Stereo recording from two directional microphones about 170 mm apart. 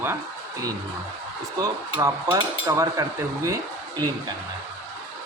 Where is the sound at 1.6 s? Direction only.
20° right (ahead or behind).